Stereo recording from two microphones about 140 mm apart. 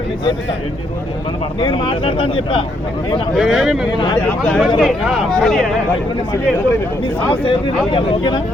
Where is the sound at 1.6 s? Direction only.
35° left (ahead or behind).